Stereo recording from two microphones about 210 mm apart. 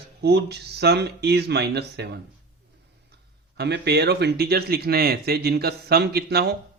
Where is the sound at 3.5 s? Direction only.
50° right (ahead or behind).